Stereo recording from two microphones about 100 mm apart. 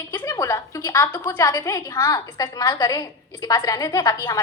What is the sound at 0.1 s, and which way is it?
A woman's voice, 35° left (ahead or behind).